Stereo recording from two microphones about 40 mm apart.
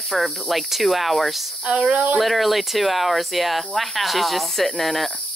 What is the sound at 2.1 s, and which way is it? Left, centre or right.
Speech, centre.